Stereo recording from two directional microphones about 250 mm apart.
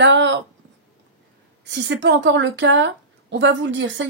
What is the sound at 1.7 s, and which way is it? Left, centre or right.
A woman's voice, right.